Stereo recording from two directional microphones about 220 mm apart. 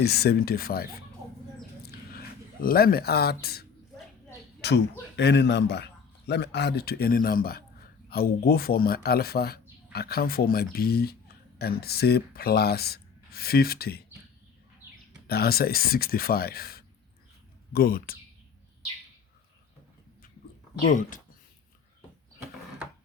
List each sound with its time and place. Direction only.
0.0 s speech: 45° left (ahead or behind)
1.8 s a sound: 45° left (ahead or behind)
4.6 s speech: 50° left (ahead or behind)
15.3 s speech: 45° left (ahead or behind)
20.8 s speech: 35° left (ahead or behind)